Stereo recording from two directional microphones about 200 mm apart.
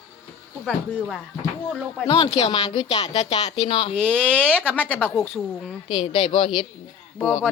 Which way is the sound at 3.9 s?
5° left (ahead or behind).